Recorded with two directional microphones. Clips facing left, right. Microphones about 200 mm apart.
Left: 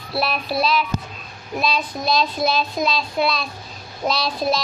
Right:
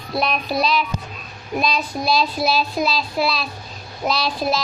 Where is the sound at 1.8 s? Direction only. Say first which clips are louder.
Right 1 dB; 5° right (ahead or behind).